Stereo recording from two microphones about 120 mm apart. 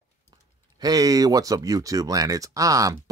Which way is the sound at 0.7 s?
30° right (ahead or behind).